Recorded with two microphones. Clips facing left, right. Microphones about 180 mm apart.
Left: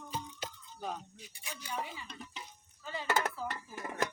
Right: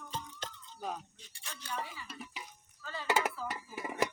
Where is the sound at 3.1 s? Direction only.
10° right (ahead or behind).